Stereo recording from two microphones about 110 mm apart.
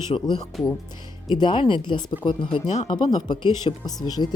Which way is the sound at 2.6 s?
90° left.